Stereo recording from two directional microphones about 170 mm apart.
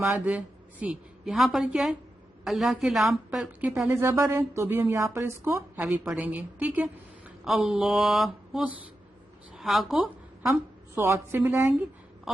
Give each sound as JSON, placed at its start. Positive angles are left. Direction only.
{"t": 0.0, "sound": "a woman's voice", "side_deg": -5}
{"t": 10.4, "sound": "a woman's voice", "side_deg": -15}